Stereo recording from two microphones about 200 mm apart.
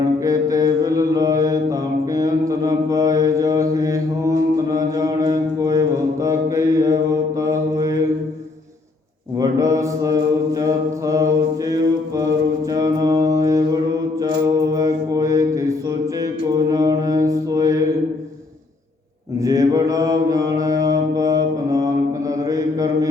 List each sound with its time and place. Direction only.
0.3 s mantra: 15° right (ahead or behind)
9.4 s mantra: 15° right (ahead or behind)
19.4 s mantra: 15° right (ahead or behind)